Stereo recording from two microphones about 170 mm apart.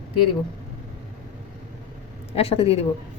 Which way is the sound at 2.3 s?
35° left (ahead or behind).